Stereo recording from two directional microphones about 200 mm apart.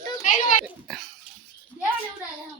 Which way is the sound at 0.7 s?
Centre (ahead or behind).